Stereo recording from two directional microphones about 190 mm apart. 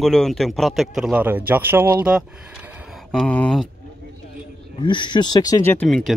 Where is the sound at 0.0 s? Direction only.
Centre (ahead or behind).